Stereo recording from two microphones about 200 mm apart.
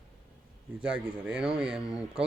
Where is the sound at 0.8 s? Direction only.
5° right (ahead or behind).